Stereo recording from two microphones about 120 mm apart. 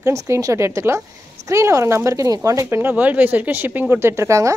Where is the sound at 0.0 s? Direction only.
25° right (ahead or behind).